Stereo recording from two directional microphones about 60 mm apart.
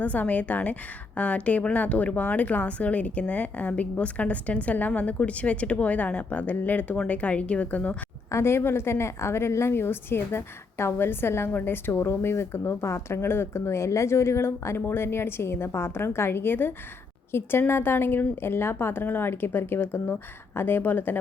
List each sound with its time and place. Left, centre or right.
0.0 s a woman's voice: left
8.3 s a woman's voice: left